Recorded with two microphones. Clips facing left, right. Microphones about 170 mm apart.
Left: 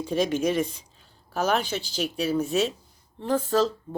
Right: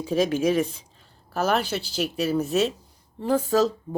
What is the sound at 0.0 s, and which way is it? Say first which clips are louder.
A woman's voice: right 2 dB; 5° right (ahead or behind).